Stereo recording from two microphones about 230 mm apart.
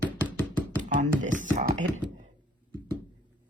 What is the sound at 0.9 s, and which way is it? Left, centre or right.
Speech, right.